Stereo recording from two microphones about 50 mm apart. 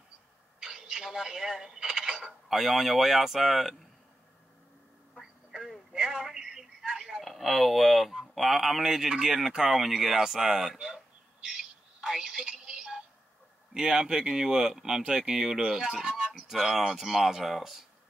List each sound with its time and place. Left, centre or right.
0.6 s speech: centre
5.2 s telephone: centre
7.2 s speech: centre
12.0 s music: centre
13.7 s speech: centre